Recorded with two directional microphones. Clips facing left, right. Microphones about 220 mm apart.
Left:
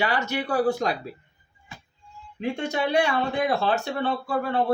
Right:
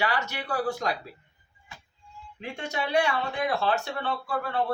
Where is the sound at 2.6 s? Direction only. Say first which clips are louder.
Left 2 dB; 25° left (ahead or behind).